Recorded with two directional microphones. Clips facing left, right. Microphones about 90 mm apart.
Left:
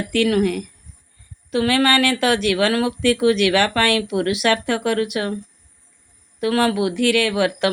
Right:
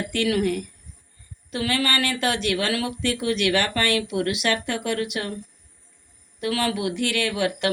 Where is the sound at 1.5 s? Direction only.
50° left (ahead or behind).